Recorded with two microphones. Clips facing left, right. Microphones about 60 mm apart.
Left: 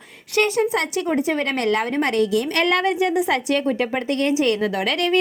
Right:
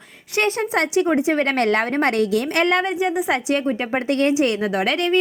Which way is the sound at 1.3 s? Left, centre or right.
Right.